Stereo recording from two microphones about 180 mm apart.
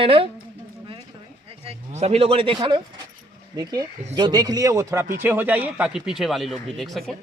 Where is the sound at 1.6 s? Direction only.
35° right (ahead or behind); by 7.0 s centre (ahead or behind).